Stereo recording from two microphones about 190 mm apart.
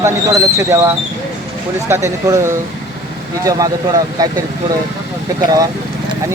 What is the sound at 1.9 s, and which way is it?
Speech, 15° right (ahead or behind).